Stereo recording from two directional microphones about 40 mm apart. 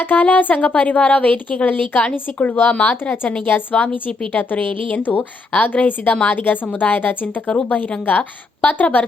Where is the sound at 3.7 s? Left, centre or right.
Left.